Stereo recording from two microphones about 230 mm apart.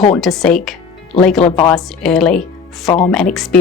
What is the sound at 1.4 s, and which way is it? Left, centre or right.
Speech, left.